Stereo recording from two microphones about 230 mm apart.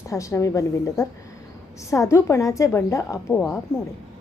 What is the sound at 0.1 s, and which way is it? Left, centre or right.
A woman's voice, centre.